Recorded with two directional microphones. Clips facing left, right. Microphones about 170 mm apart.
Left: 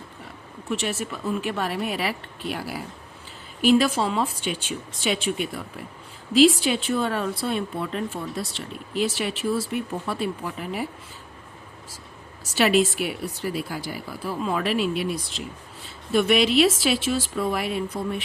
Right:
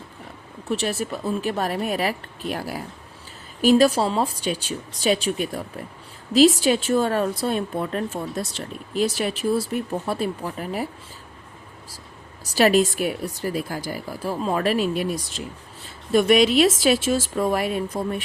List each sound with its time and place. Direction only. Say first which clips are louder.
0.7 s speech: right 3 dB; 35° right (ahead or behind)
12.5 s speech: right 2 dB; 40° right (ahead or behind)